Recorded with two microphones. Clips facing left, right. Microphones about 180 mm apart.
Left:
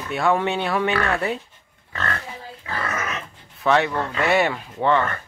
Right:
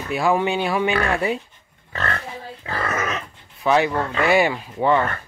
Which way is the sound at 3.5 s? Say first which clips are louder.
Right 1 dB; 5° right (ahead or behind).